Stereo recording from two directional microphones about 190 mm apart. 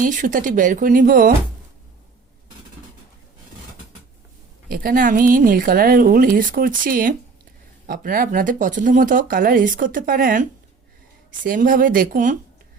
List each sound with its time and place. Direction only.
0.0 s speech: 45° right (ahead or behind)
4.7 s speech: 50° right (ahead or behind)